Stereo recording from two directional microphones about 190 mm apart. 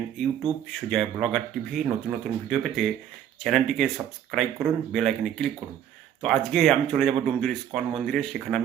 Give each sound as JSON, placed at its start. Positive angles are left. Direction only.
{"t": 0.4, "sound": "speech", "side_deg": 0}